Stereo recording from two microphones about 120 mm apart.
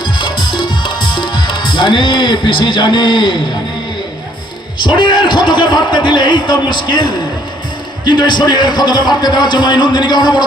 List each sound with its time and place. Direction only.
0.0 s music: 40° left (ahead or behind)
4.8 s a man's voice: 40° left (ahead or behind)